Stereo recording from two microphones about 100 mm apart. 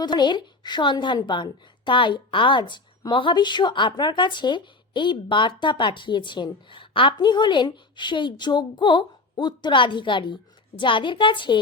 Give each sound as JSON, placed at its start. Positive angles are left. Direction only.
{"t": 0.0, "sound": "a woman's voice", "side_deg": 45}